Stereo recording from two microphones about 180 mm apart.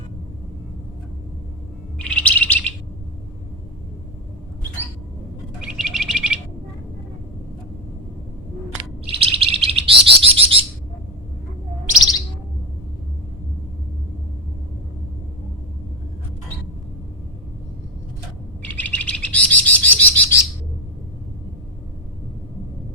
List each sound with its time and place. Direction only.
2.0 s bird: 5° left (ahead or behind)
5.5 s bird: 5° right (ahead or behind)
9.0 s bird: 30° right (ahead or behind)
18.6 s bird: 10° left (ahead or behind)